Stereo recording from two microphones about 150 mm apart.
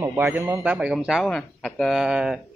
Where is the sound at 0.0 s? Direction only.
15° right (ahead or behind).